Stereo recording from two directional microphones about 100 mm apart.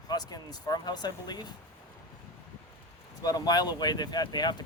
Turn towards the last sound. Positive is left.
turn(degrees=45)  # may be behind; listen again after turning